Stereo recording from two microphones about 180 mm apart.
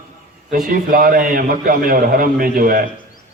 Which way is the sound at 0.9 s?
50° right (ahead or behind).